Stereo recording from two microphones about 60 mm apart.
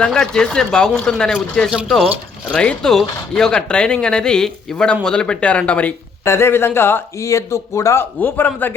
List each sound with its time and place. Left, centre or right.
0.0 s speech: centre
6.2 s a man's voice: left
8.2 s a man's voice: left